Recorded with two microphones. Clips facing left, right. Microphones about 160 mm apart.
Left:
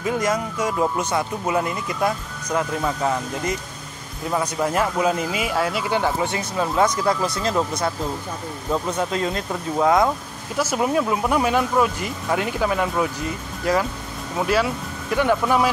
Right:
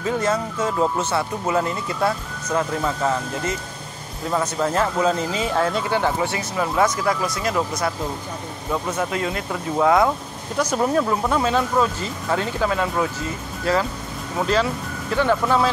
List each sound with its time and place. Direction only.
0.0 s speech: 15° left (ahead or behind)
9.8 s speech: 20° left (ahead or behind)
10.6 s speech: 5° left (ahead or behind)